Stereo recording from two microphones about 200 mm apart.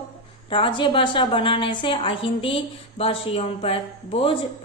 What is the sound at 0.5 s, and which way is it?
A woman's voice, 25° left (ahead or behind).